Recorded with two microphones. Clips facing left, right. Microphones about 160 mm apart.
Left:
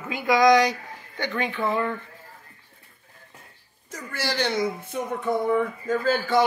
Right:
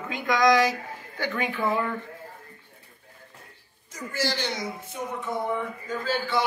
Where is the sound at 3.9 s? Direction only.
65° left (ahead or behind).